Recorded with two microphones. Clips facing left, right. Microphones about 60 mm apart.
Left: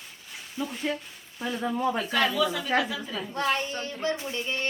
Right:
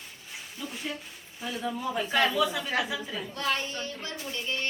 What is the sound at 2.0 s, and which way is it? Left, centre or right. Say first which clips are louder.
A woman's voice: even; centre.